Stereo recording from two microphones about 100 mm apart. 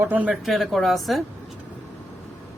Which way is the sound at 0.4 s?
Centre (ahead or behind).